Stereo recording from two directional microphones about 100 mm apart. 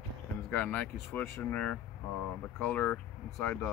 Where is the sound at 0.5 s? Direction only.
15° left (ahead or behind).